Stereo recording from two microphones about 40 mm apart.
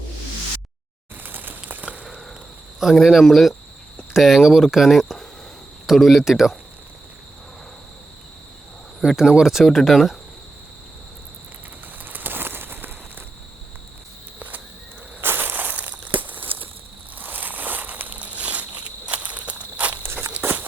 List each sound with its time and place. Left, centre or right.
1.2 s a sound: right
3.0 s speech: centre
9.0 s speech: centre
12.0 s bird: right
15.2 s crushing: right
15.5 s walk: right
17.2 s a sound: right
19.0 s walk: right
20.4 s a sound: right